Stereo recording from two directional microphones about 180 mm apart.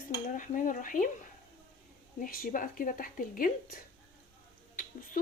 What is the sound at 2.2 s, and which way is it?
A woman's voice, 50° left (ahead or behind).